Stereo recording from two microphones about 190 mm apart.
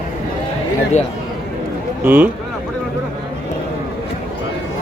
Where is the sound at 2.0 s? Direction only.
10° right (ahead or behind).